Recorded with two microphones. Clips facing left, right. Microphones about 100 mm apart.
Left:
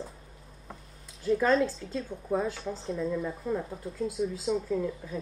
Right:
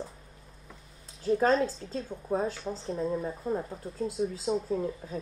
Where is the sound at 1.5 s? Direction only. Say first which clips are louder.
Left 1 dB; 35° right (ahead or behind).